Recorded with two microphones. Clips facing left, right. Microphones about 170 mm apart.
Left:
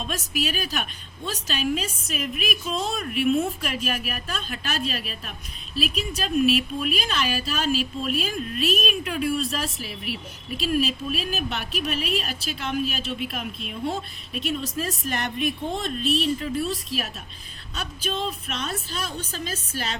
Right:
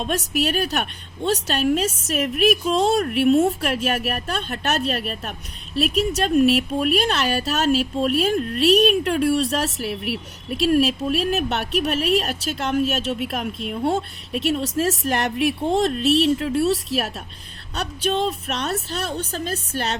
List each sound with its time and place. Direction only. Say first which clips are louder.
0.0 s a woman's voice: right 6 dB; 65° right (ahead or behind); by 3.0 s 85° right
3.0 s speech: right 5 dB; 45° right (ahead or behind)
3.6 s a woman's voice: right 6 dB; 70° right (ahead or behind)